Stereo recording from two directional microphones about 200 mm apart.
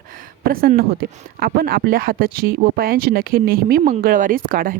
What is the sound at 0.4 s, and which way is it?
Speech, 45° right (ahead or behind).